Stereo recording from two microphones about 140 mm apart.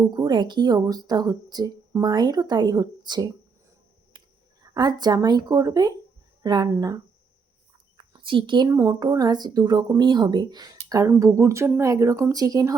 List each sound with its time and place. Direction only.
0.1 s speech: 35° right (ahead or behind)
4.6 s speech: 30° right (ahead or behind)
7.9 s a sound: 35° right (ahead or behind)
8.7 s speech: 25° right (ahead or behind)